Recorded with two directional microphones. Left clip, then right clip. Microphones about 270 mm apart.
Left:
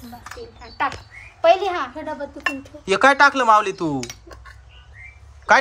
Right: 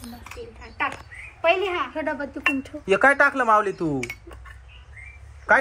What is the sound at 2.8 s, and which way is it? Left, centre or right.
Speech, centre.